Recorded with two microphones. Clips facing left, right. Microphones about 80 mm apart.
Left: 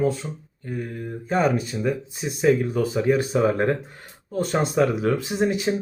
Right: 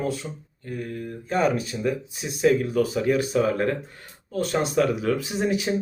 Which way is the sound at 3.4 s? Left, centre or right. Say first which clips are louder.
Left 2 dB; left.